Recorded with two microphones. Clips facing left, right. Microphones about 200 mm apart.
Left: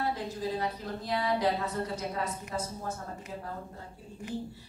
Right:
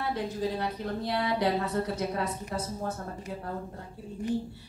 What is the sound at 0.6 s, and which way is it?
Speech, 70° right (ahead or behind).